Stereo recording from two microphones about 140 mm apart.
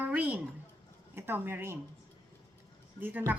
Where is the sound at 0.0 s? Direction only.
10° right (ahead or behind).